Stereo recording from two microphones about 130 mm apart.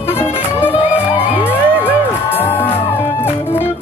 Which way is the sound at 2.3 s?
15° left (ahead or behind).